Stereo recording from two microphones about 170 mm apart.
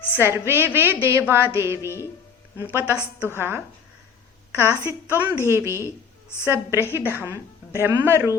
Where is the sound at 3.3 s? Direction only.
15° right (ahead or behind).